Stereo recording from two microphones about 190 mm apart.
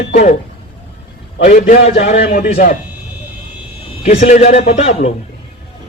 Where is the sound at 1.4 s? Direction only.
50° left (ahead or behind).